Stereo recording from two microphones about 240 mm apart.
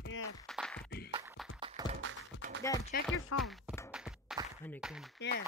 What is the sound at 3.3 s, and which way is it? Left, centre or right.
Speech, left.